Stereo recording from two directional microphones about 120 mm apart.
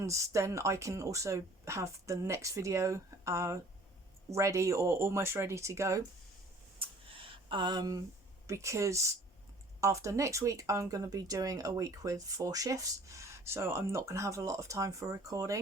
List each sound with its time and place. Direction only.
0.0 s speech: 25° right (ahead or behind)
6.7 s a sound: 50° right (ahead or behind)
8.4 s speech: 25° right (ahead or behind)